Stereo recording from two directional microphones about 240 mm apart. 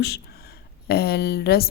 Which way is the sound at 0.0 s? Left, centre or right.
Left.